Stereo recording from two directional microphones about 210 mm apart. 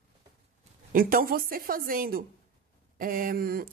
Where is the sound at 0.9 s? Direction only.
45° right (ahead or behind).